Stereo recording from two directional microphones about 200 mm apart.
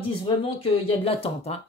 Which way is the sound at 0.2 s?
25° left (ahead or behind).